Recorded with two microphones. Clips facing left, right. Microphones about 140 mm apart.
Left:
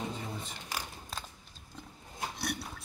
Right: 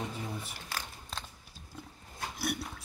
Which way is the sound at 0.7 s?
15° left (ahead or behind).